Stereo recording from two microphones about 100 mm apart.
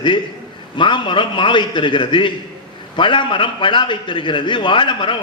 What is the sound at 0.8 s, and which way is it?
A man's voice, 55° left (ahead or behind).